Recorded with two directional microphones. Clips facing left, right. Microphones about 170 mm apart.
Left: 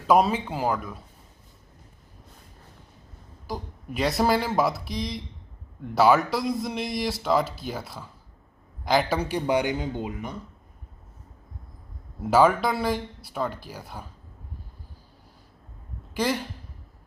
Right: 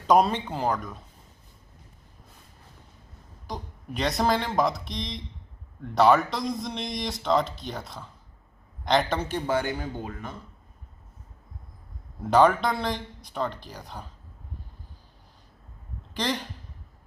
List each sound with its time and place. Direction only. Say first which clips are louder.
0.1 s a man's voice: even; 5° left (ahead or behind)
3.4 s a man's voice: left 3 dB; 5° left (ahead or behind)
12.2 s speech: even; 5° left (ahead or behind)
16.1 s speech: left 3 dB; 10° left (ahead or behind)